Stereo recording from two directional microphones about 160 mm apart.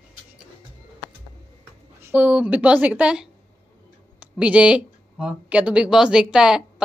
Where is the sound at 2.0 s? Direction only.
10° right (ahead or behind).